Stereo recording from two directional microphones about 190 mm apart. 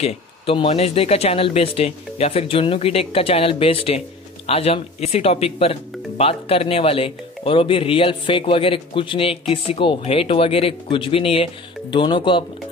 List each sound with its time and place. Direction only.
0.0 s speech: 30° left (ahead or behind)